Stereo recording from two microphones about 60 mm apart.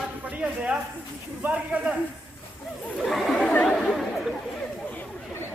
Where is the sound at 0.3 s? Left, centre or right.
Right.